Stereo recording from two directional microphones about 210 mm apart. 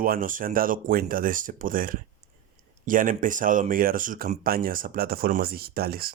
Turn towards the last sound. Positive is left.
turn(degrees=-45)  # may be behind; listen again after turning